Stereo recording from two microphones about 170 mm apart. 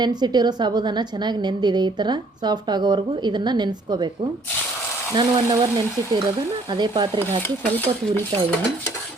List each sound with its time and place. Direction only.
0.0 s a woman's voice: 25° right (ahead or behind)
5.1 s a woman's voice: 25° right (ahead or behind)
7.4 s speech: 10° left (ahead or behind)